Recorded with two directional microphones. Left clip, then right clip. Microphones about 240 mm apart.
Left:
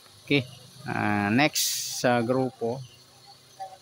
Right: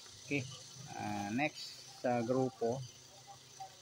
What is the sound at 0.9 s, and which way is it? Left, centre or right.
Speech, left.